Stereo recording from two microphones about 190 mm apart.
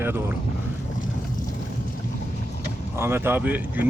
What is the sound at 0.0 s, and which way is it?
Speech, 10° right (ahead or behind).